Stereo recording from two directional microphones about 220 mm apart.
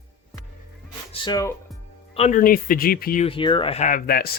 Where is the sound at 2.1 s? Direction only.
30° left (ahead or behind).